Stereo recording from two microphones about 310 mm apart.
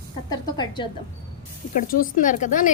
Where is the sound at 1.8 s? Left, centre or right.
Left.